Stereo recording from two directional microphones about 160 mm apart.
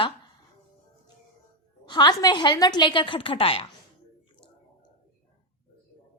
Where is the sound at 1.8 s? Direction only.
25° left (ahead or behind).